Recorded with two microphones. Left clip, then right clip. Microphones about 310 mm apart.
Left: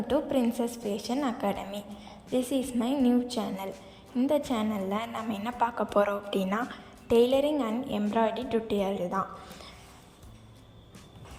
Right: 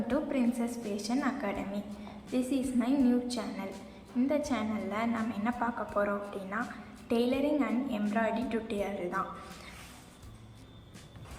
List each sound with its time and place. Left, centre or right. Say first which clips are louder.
0.1 s a woman's voice: left 5 dB; left